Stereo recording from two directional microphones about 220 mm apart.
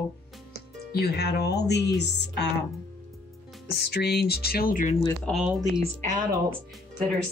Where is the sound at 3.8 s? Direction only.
45° left (ahead or behind).